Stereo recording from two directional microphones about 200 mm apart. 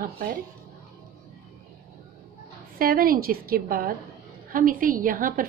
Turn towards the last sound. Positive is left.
turn(degrees=-45)  # may be behind; listen again after turning